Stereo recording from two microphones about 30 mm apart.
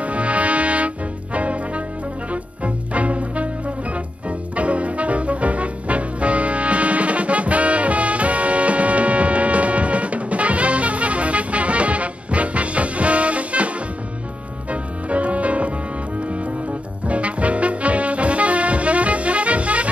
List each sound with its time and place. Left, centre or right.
0.0 s music: right